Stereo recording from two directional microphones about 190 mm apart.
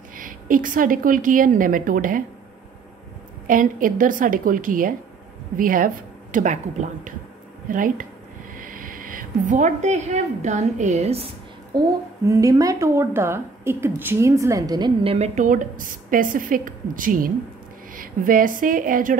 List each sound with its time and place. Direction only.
0.1 s a woman's voice: 45° right (ahead or behind)
3.4 s a woman's voice: 45° right (ahead or behind)
11.7 s female singing: 20° right (ahead or behind)
12.3 s a woman's voice: 15° right (ahead or behind)
15.1 s a woman's voice: 35° right (ahead or behind)